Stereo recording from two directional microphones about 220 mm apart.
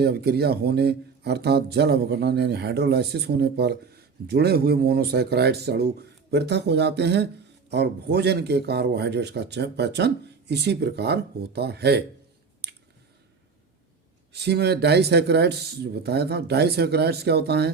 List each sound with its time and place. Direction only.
0.0 s speech: 45° right (ahead or behind)
12.6 s clicking: 50° right (ahead or behind)
14.3 s speech: 50° right (ahead or behind)